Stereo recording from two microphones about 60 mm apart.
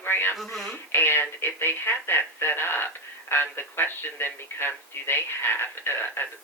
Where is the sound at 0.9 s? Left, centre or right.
Left.